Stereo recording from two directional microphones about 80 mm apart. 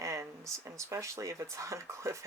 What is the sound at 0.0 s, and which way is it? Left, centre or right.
Speech, right.